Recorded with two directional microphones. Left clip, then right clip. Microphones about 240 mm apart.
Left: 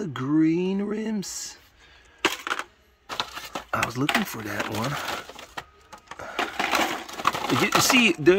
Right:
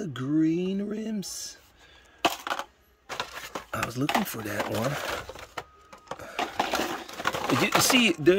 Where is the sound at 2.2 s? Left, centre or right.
Right.